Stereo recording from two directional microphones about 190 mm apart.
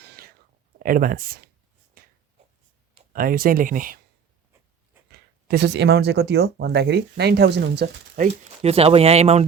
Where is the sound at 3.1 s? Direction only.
50° right (ahead or behind).